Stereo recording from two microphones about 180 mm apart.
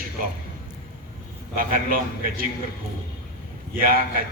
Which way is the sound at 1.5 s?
50° right (ahead or behind).